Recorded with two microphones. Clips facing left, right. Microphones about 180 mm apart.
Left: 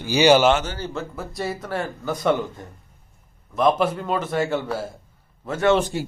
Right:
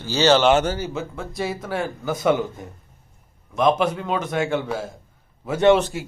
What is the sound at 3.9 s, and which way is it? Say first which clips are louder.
Speech: even; 10° right (ahead or behind).